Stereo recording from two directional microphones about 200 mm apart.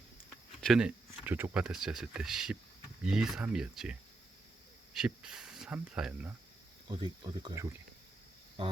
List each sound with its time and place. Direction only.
0.6 s speech: centre (ahead or behind)
4.9 s speech: 5° right (ahead or behind)
6.8 s speech: 25° right (ahead or behind)